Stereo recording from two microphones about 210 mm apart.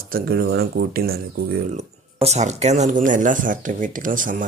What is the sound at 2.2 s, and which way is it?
Speech, 30° right (ahead or behind).